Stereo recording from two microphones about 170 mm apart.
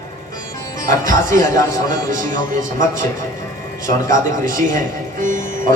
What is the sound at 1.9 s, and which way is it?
Speech, 50° right (ahead or behind).